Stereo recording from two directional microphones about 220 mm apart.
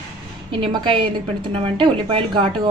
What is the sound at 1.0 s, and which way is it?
A woman's voice, 25° right (ahead or behind).